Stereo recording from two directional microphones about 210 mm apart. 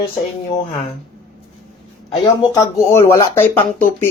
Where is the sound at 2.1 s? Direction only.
15° left (ahead or behind).